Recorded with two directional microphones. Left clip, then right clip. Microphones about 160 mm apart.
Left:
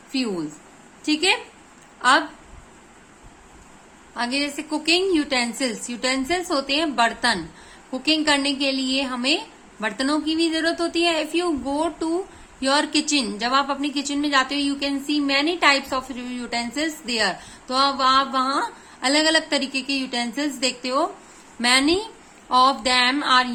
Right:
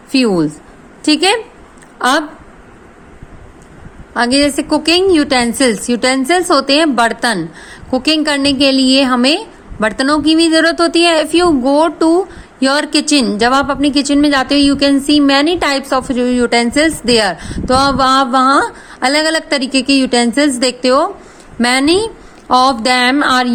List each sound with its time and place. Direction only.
0.1 s a woman's voice: 55° right (ahead or behind)
4.1 s a woman's voice: 50° right (ahead or behind)